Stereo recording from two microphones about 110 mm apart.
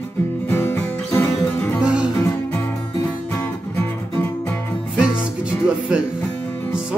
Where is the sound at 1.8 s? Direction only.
10° right (ahead or behind).